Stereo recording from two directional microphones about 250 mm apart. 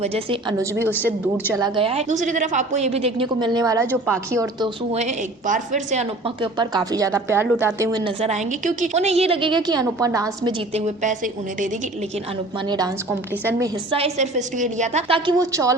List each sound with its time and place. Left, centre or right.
0.0 s a woman's voice: right
0.9 s a woman's voice: centre
1.5 s a woman's voice: centre
3.8 s a woman's voice: centre
4.3 s a woman's voice: centre
4.9 s a woman's voice: right
10.8 s a woman's voice: right
12.6 s a woman's voice: centre
13.9 s a woman's voice: right